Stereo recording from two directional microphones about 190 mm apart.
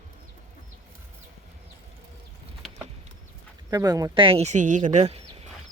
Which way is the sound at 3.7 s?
20° right (ahead or behind).